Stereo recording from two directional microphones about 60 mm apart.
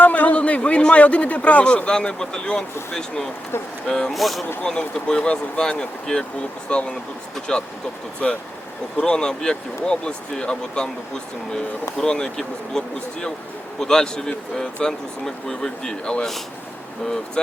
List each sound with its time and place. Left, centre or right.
0.0 s a man's voice: left
4.1 s speech: centre
4.6 s speech: centre